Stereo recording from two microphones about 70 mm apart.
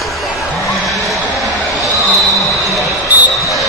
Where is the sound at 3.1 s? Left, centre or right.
Right.